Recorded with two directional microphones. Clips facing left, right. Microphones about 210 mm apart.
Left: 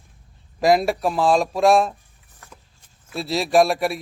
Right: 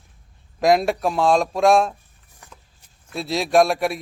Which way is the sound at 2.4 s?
15° right (ahead or behind).